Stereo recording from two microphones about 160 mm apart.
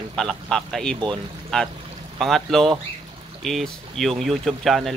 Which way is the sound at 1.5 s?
5° left (ahead or behind).